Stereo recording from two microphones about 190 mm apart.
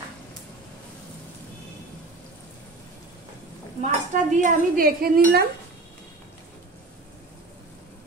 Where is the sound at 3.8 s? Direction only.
40° right (ahead or behind).